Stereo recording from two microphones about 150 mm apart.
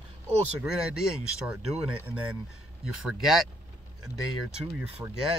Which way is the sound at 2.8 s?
5° right (ahead or behind).